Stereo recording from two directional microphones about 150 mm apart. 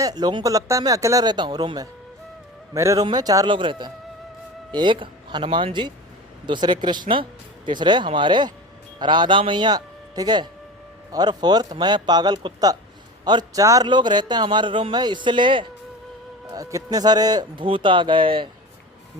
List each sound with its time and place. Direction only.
0.0 s a man's voice: 25° right (ahead or behind)